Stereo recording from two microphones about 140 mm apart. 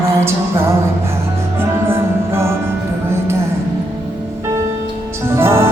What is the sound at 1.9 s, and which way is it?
Music, 20° right (ahead or behind).